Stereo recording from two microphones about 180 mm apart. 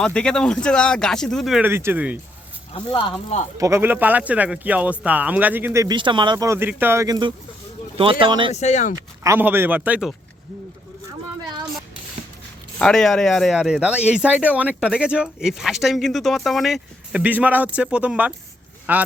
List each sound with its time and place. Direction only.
0.0 s speech: 5° left (ahead or behind)
2.7 s speech: 30° left (ahead or behind)
3.6 s a man's voice: 15° right (ahead or behind)
8.5 s speech: 40° left (ahead or behind)
9.2 s a man's voice: 15° right (ahead or behind)
12.8 s a man's voice: centre (ahead or behind)